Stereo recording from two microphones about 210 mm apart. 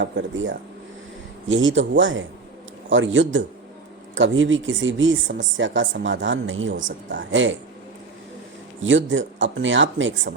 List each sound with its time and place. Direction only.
0.0 s speech: 60° right (ahead or behind)
8.8 s speech: 65° right (ahead or behind)